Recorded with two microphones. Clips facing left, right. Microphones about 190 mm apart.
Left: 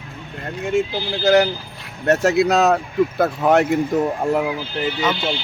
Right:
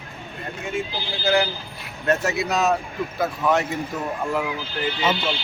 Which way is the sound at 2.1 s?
70° left (ahead or behind).